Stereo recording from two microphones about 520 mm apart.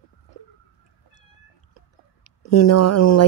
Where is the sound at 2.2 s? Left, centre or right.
Left.